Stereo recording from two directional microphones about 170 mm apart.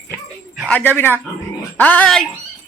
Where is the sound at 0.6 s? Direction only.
10° left (ahead or behind).